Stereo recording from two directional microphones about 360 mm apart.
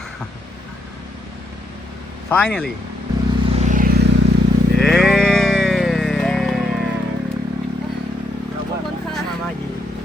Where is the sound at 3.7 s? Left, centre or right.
Right.